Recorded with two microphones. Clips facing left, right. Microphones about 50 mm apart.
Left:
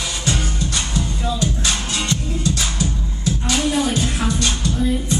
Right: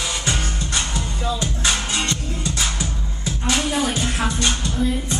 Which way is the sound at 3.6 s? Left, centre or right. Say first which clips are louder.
Left 3 dB; centre.